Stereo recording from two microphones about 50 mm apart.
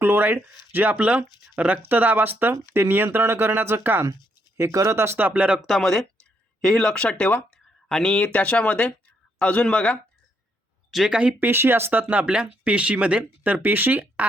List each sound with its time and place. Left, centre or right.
0.0 s speech: right
1.8 s speech: right
2.3 s speech: right
4.5 s speech: right
5.1 s speech: right
5.6 s speech: centre
7.5 s a sound: centre
8.1 s speech: left
11.1 s speech: right
11.3 s speech: right
12.1 s speech: right